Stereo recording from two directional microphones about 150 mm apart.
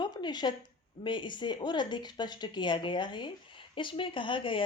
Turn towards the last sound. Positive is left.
turn(degrees=35)  # may be behind; listen again after turning